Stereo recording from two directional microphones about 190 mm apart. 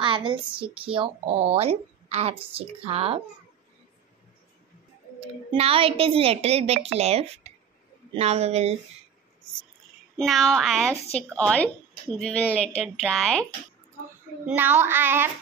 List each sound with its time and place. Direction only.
0.0 s speech: 25° right (ahead or behind)
5.2 s speech: 30° right (ahead or behind)
10.1 s speech: centre (ahead or behind)
14.4 s child singing: 10° right (ahead or behind)